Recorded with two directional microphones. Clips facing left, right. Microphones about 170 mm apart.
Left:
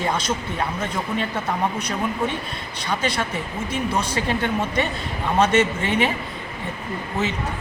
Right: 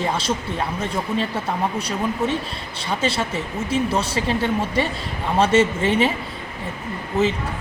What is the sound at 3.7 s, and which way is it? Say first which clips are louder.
Speech: right 3 dB; 30° right (ahead or behind).